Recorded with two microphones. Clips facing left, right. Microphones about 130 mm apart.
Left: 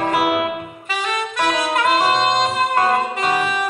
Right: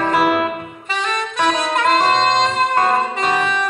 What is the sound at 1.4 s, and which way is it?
Saxophone, 5° left (ahead or behind).